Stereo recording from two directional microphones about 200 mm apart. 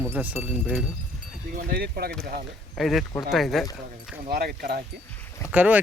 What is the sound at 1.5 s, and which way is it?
Speech, 50° right (ahead or behind).